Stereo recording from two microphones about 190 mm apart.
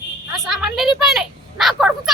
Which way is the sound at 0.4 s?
Centre (ahead or behind).